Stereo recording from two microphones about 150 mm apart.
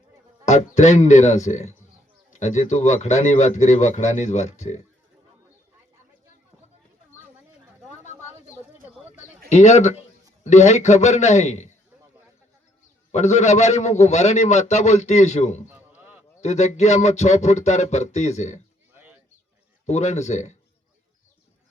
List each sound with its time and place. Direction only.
0.4 s a man's voice: 50° left (ahead or behind)
9.5 s a man's voice: 50° left (ahead or behind)
13.1 s a man's voice: 50° left (ahead or behind)
15.7 s a sound: 10° right (ahead or behind)
16.4 s a man's voice: 50° left (ahead or behind)
19.9 s a man's voice: 50° left (ahead or behind)